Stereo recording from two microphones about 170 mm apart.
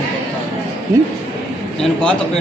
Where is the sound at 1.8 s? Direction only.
5° left (ahead or behind).